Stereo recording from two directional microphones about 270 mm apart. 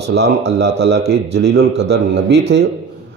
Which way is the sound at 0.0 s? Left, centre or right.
Right.